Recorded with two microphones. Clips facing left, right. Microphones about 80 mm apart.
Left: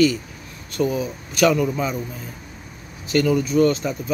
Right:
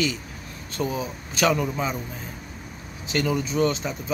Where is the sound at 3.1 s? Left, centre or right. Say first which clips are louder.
Left 6 dB; centre.